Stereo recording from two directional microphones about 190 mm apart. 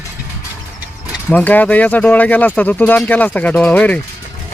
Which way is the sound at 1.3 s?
10° left (ahead or behind).